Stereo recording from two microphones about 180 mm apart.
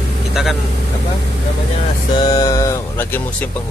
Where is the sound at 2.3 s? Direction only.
20° left (ahead or behind).